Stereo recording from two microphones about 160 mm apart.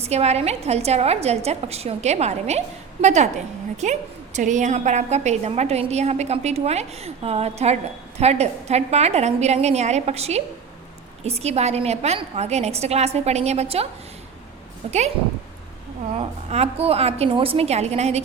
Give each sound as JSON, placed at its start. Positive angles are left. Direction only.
{"t": 0.0, "sound": "a woman's voice", "side_deg": -40}
{"t": 14.8, "sound": "a woman's voice", "side_deg": -45}
{"t": 16.1, "sound": "a woman's voice", "side_deg": -40}